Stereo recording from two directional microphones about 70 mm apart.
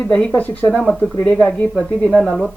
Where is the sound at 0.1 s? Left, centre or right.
Centre.